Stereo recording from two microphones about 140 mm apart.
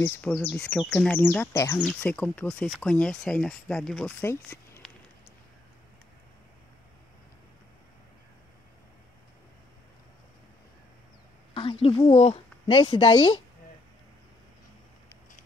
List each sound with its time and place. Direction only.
0.0 s speech: 10° left (ahead or behind)
4.3 s speech: 20° left (ahead or behind)
11.5 s a woman's voice: 40° left (ahead or behind)